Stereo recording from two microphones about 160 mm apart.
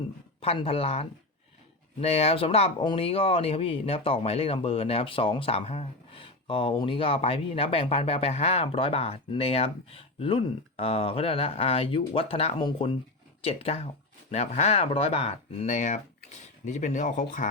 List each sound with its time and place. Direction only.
0.3 s speech: 35° left (ahead or behind); by 17.5 s 50° left (ahead or behind)